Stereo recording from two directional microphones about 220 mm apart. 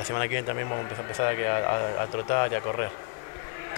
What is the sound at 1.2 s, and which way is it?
Speech, 25° left (ahead or behind).